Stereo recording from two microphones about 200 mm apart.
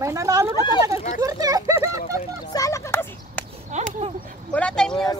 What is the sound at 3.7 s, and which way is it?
Speech, 35° right (ahead or behind).